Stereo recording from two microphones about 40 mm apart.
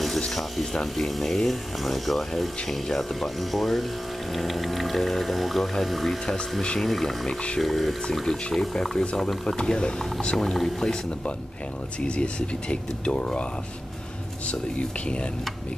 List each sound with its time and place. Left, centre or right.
0.3 s speech: centre
8.3 s speech: centre
10.3 s speech: centre
12.0 s speech: left
14.5 s speech: left